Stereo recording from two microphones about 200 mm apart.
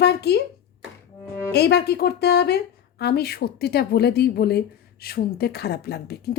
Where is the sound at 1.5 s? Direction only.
55° left (ahead or behind).